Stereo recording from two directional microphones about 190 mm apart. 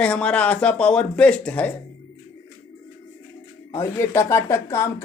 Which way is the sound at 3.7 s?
15° left (ahead or behind).